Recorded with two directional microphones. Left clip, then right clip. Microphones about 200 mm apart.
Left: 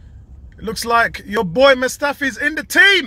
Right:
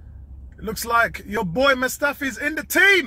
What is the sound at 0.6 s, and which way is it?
Speech, 15° left (ahead or behind).